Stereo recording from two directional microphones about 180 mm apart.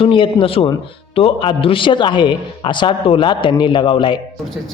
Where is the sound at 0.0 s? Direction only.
30° left (ahead or behind).